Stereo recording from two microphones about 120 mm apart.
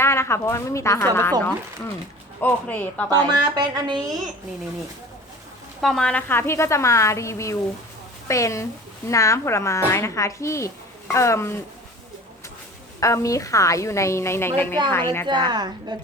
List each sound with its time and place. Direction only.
0.0 s a woman's voice: 20° left (ahead or behind)
3.3 s a woman's voice: 35° right (ahead or behind)
5.8 s a woman's voice: 5° left (ahead or behind); by 11.5 s 25° left (ahead or behind)
13.0 s a woman's voice: 25° left (ahead or behind)
15.4 s a woman's voice: 35° right (ahead or behind)